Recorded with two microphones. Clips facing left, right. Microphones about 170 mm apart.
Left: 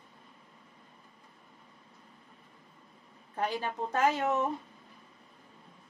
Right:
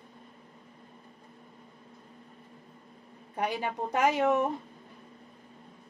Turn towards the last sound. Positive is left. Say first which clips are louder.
# right 3 dB
turn(degrees=-15)  # may be behind; listen again after turning